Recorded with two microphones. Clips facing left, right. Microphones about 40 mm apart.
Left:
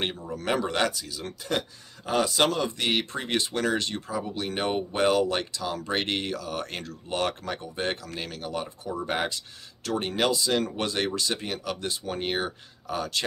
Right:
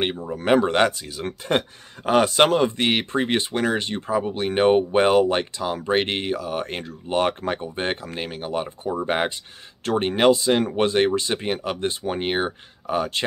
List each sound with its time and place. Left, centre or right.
0.0 s speech: right